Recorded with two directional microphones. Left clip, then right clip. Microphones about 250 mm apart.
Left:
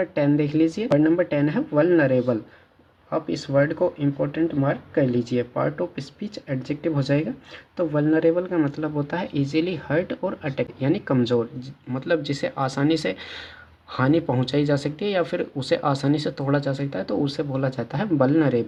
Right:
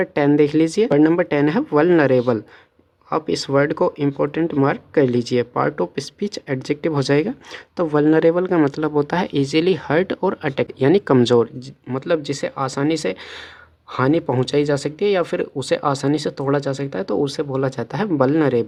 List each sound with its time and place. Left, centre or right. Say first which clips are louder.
0.0 s speech: right 6 dB; right